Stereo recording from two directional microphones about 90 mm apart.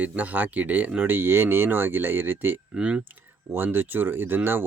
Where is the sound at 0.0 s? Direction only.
15° right (ahead or behind).